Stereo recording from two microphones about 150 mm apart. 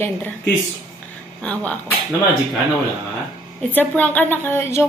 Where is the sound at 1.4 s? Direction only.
10° left (ahead or behind).